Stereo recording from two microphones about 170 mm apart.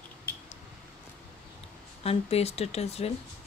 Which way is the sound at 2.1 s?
35° left (ahead or behind).